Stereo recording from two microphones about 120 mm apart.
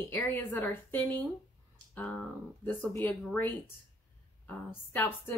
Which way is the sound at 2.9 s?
15° left (ahead or behind).